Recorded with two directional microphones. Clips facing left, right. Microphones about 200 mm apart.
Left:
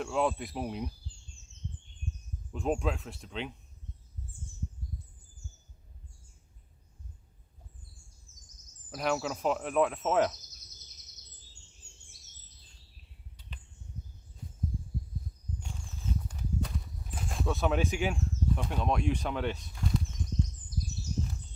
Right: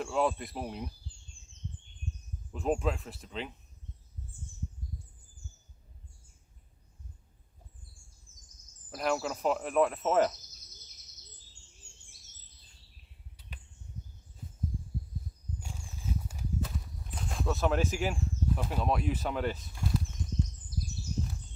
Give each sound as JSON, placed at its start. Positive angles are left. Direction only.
{"t": 0.0, "sound": "speech", "side_deg": 0}
{"t": 2.5, "sound": "speech", "side_deg": 0}
{"t": 8.3, "sound": "a sound", "side_deg": 40}
{"t": 8.9, "sound": "speech", "side_deg": 0}
{"t": 15.6, "sound": "walk", "side_deg": -5}